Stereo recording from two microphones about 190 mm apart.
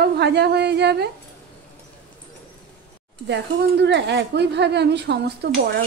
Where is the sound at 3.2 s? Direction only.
65° right (ahead or behind).